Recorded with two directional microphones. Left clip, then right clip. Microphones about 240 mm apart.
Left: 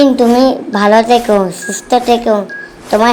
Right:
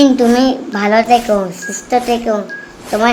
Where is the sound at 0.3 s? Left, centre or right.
Centre.